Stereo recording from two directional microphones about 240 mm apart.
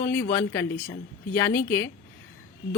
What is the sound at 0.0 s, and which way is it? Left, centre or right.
A woman's voice, centre.